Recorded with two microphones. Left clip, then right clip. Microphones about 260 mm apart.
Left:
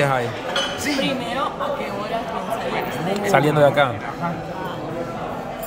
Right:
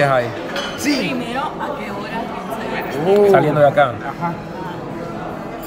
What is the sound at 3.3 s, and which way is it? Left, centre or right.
Speech, centre.